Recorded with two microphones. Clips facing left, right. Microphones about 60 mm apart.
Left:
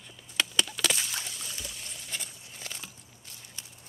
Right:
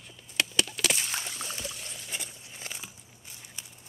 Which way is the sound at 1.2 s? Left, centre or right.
Right.